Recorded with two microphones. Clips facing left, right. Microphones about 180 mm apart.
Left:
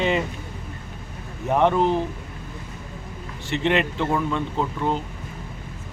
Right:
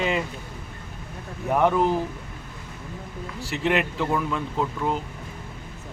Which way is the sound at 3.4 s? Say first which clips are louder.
Left 2 dB; 5° right (ahead or behind).